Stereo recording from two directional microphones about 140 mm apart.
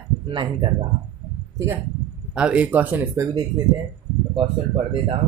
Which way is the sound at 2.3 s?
5° right (ahead or behind).